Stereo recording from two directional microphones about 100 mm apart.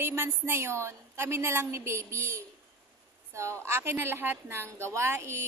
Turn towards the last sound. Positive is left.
turn(degrees=-25)  # may be behind; listen again after turning